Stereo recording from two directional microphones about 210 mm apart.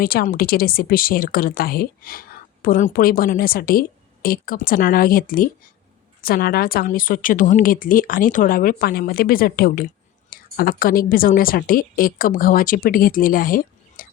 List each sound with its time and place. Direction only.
0.0 s a woman's voice: 45° left (ahead or behind)